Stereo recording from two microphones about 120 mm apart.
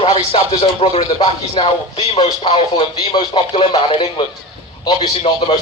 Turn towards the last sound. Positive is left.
turn(degrees=50)  # may be behind; listen again after turning